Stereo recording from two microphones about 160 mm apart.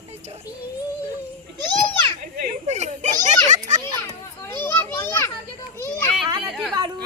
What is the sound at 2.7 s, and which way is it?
A child's voice, 45° right (ahead or behind).